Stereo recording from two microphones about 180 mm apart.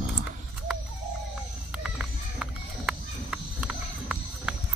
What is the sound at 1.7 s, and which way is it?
Run, 5° right (ahead or behind).